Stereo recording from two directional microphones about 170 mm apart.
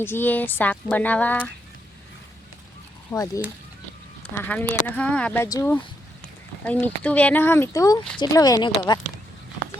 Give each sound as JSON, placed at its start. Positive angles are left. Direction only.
{"t": 0.0, "sound": "speech", "side_deg": 10}
{"t": 3.1, "sound": "speech", "side_deg": 20}
{"t": 4.4, "sound": "speech", "side_deg": 10}